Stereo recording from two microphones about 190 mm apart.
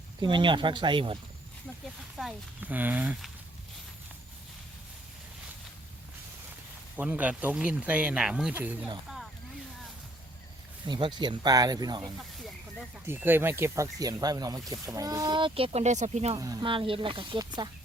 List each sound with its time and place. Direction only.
0.2 s speech: 25° right (ahead or behind)
2.1 s speech: 5° right (ahead or behind)
6.9 s speech: 10° right (ahead or behind)
10.8 s speech: 25° right (ahead or behind)
12.1 s speech: centre (ahead or behind)
13.1 s speech: 10° right (ahead or behind); by 16.4 s 35° right (ahead or behind)
16.4 s speech: 20° right (ahead or behind)